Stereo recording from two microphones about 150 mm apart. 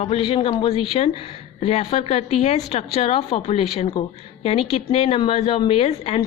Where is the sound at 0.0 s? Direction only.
40° left (ahead or behind).